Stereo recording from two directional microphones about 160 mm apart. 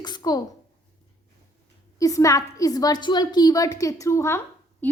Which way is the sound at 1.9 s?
20° left (ahead or behind).